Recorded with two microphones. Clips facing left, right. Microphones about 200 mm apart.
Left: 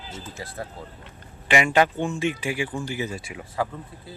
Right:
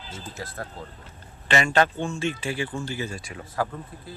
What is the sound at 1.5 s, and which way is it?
Speech, 15° left (ahead or behind).